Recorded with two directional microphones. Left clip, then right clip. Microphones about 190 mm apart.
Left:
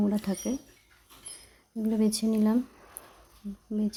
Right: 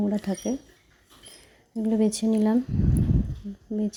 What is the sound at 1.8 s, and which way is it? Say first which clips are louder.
Speech: right 4 dB; 15° right (ahead or behind).